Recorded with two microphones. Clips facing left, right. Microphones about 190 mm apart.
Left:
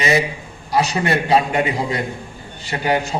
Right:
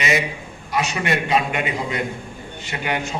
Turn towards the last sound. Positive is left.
turn(degrees=35)  # may be behind; listen again after turning